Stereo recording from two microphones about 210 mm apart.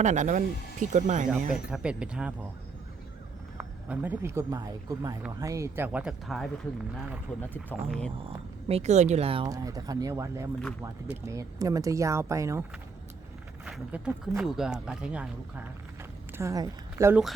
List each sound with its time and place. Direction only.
0.0 s speech: 35° right (ahead or behind)
1.5 s speech: 5° right (ahead or behind)
3.6 s speech: 10° right (ahead or behind)
7.3 s speech: 10° left (ahead or behind)
8.6 s speech: 30° right (ahead or behind); by 12.6 s 15° right (ahead or behind)
13.7 s speech: 5° right (ahead or behind)
16.4 s speech: 15° right (ahead or behind)